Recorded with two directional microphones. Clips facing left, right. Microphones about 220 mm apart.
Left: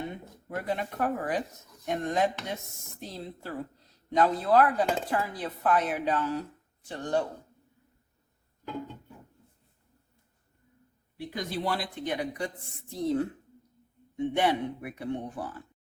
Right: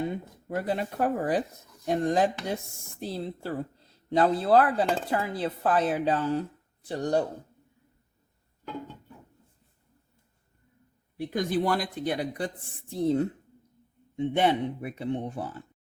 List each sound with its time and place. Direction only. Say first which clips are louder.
0.4 s speech: right 3 dB; 35° right (ahead or behind)
4.1 s chopping: right 2 dB; 30° right (ahead or behind)
6.8 s speech: right 3 dB; 35° right (ahead or behind)
11.2 s speech: right 6 dB; 50° right (ahead or behind); by 12.5 s 35° right (ahead or behind)
13.1 s chopping: right 2 dB; 25° right (ahead or behind)